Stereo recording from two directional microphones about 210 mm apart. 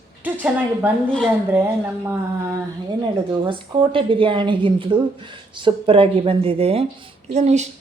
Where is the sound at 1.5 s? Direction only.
10° right (ahead or behind).